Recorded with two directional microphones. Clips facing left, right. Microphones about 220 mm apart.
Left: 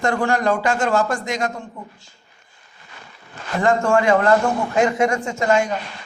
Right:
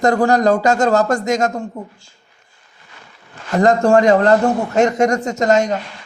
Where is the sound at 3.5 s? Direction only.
40° right (ahead or behind).